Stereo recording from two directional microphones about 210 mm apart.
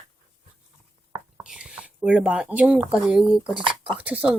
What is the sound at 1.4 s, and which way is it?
Speech, 5° right (ahead or behind).